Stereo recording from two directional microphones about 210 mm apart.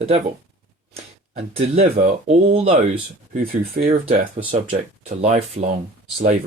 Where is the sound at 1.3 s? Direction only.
30° right (ahead or behind).